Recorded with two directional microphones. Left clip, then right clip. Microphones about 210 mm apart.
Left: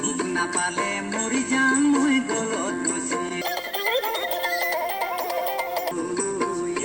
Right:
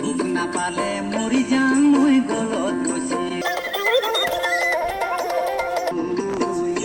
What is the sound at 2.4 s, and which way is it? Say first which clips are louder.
Music: right 3 dB; 35° right (ahead or behind).